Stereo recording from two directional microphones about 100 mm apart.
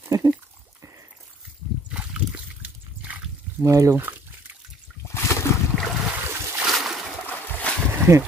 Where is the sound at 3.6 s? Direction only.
30° right (ahead or behind).